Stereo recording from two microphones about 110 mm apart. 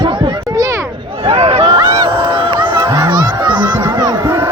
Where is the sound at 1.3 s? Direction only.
65° right (ahead or behind).